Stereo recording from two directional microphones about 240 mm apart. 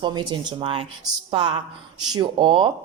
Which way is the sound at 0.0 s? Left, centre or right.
Centre.